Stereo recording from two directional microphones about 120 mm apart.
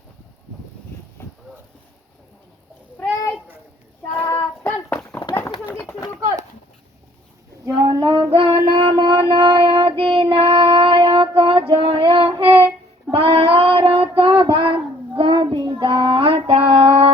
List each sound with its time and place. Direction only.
1.2 s a sound: 20° left (ahead or behind)
3.0 s a sound: 30° left (ahead or behind)
4.3 s child singing: 15° left (ahead or behind)
7.9 s child singing: 40° right (ahead or behind)
8.3 s a sound: 45° right (ahead or behind)
10.0 s child singing: 45° right (ahead or behind)
11.7 s female singing: 45° right (ahead or behind)
13.1 s child singing: 50° right (ahead or behind)
15.8 s female singing: 45° right (ahead or behind)